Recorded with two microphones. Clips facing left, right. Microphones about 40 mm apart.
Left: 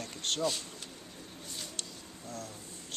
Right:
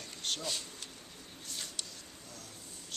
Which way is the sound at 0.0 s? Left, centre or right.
Left.